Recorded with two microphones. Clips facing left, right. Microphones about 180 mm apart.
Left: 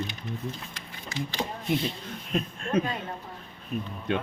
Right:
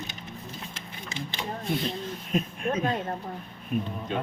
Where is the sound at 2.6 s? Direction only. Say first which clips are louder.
Left 4 dB; 15° right (ahead or behind).